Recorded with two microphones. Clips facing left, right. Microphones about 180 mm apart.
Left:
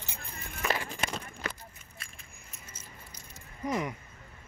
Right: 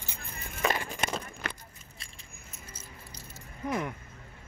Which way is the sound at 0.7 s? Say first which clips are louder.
Right 1 dB; 45° right (ahead or behind).